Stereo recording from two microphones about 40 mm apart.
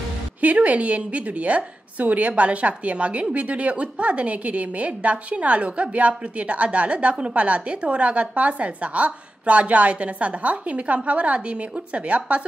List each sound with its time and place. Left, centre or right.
0.4 s a woman's voice: right